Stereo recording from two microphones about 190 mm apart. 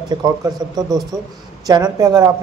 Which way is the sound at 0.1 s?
20° right (ahead or behind).